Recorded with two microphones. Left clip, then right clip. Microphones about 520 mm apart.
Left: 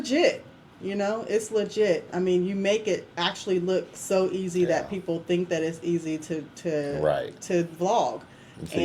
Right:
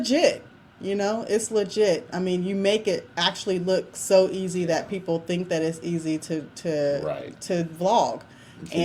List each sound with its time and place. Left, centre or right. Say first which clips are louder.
0.0 s speech: right 2 dB; right